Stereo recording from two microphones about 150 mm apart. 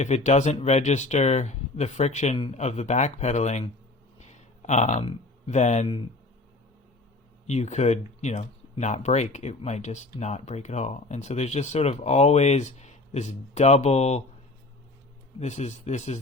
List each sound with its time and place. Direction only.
0.0 s speech: 50° left (ahead or behind)
4.2 s a sound: 50° left (ahead or behind)
5.5 s speech: 50° left (ahead or behind)
7.4 s speech: 50° left (ahead or behind)
15.4 s speech: 50° left (ahead or behind)